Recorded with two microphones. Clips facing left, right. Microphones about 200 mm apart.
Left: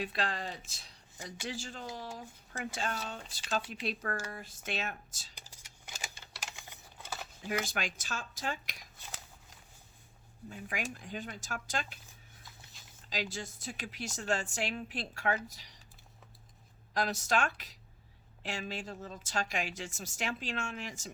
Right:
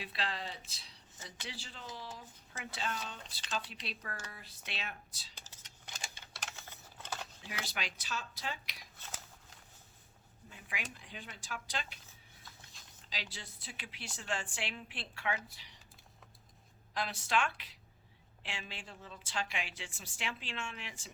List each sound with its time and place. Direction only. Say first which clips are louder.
0.0 s speech: left 5 dB; 45° left (ahead or behind)
1.1 s a man's voice: left 7 dB; 10° left (ahead or behind)
1.5 s speech: left 7 dB; 45° left (ahead or behind)
5.3 s a sound: left 1 dB; 10° left (ahead or behind)
7.4 s speech: left 12 dB; 50° left (ahead or behind)
9.0 s scissors: even; 10° left (ahead or behind)
10.5 s speech: left 7 dB; 45° left (ahead or behind)
12.7 s a sound: left 1 dB; centre (ahead or behind)
13.1 s speech: left 9 dB; 45° left (ahead or behind)
16.9 s speech: left 3 dB; 40° left (ahead or behind)